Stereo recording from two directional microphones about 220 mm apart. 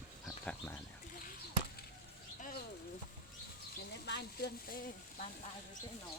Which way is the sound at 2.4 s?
45° left (ahead or behind).